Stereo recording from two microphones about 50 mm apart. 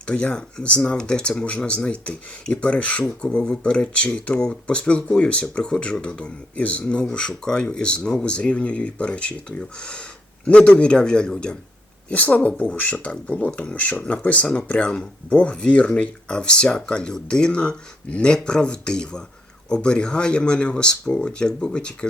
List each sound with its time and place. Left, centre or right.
0.0 s speech: left
12.0 s speech: left